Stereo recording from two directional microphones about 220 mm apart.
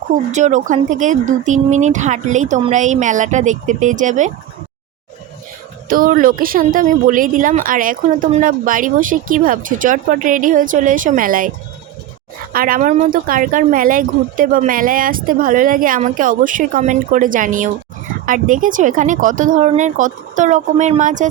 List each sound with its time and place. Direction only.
0.1 s speech: 35° right (ahead or behind)
5.9 s speech: 40° right (ahead or behind)
12.5 s speech: 40° right (ahead or behind)